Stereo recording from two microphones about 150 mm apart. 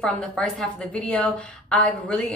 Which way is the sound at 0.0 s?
5° left (ahead or behind).